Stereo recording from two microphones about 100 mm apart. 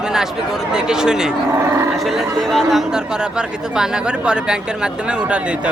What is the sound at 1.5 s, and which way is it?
Speech, 30° right (ahead or behind).